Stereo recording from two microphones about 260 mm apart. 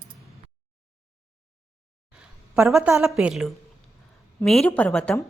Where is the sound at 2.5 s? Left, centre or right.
Centre.